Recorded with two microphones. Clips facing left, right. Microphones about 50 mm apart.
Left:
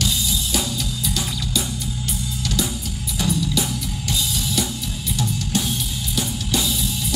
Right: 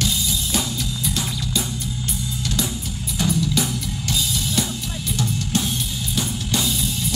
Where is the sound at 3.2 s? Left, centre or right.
Right.